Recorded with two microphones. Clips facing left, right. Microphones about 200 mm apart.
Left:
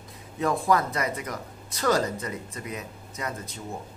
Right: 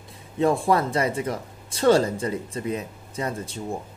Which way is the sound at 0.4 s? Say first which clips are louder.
Right 3 dB; 30° right (ahead or behind).